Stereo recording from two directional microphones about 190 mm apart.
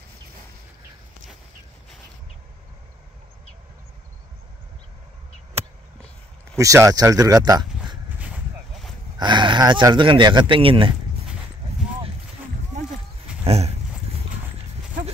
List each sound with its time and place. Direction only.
6.5 s speech: 15° right (ahead or behind)
9.2 s speech: 25° right (ahead or behind)
13.4 s a sound: 35° right (ahead or behind)